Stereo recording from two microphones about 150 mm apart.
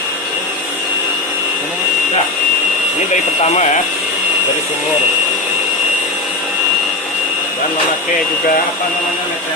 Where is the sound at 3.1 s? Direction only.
50° left (ahead or behind).